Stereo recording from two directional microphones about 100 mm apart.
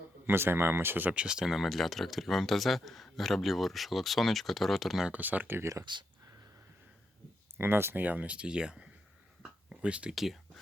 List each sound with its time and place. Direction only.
0.3 s speech: 20° right (ahead or behind); by 5.0 s centre (ahead or behind)
5.0 s speech: 15° right (ahead or behind)
5.8 s speech: 50° right (ahead or behind)
7.6 s speech: 25° right (ahead or behind); by 10.3 s 5° right (ahead or behind)